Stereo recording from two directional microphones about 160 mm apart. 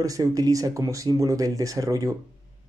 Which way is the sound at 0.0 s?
20° right (ahead or behind).